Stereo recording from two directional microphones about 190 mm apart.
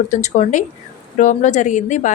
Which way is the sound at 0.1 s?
40° left (ahead or behind).